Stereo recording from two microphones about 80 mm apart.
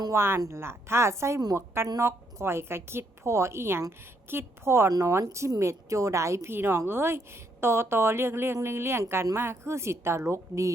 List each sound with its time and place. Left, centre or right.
0.1 s a woman's voice: right